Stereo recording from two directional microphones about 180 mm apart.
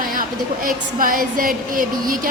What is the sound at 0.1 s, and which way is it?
A woman's voice, 50° right (ahead or behind).